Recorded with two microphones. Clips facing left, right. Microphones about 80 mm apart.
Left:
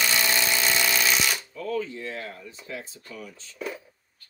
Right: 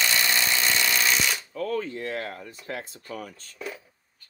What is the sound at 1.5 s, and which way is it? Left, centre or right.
Speech, right.